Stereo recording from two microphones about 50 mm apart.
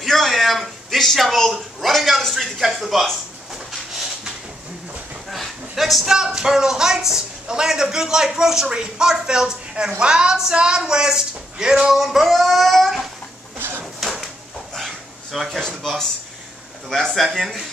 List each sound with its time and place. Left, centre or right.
0.0 s speech: centre
5.3 s a sound: centre
6.1 s speech: centre
13.6 s drawer open or close: right
13.9 s a sound: centre
15.3 s speech: centre
15.6 s speech: centre